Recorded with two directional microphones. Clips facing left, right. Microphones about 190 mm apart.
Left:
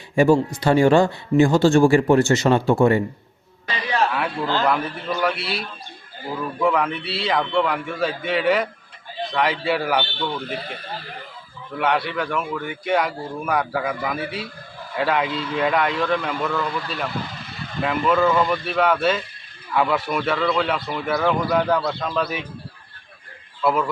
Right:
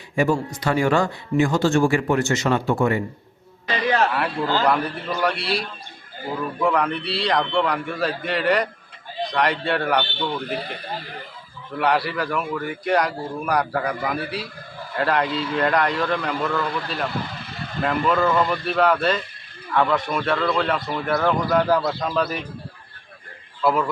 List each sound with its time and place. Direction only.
0.2 s speech: 30° left (ahead or behind)
4.1 s speech: centre (ahead or behind)
11.8 s speech: centre (ahead or behind)
23.6 s speech: centre (ahead or behind)